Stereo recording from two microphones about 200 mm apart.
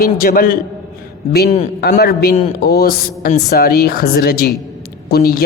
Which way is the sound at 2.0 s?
50° left (ahead or behind).